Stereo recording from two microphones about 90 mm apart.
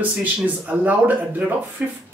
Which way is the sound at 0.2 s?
20° right (ahead or behind).